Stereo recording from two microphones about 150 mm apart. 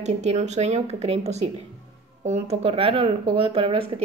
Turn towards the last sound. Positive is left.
turn(degrees=-40)  # may be behind; listen again after turning